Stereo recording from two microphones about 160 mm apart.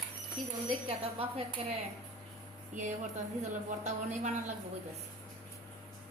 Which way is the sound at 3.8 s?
45° right (ahead or behind).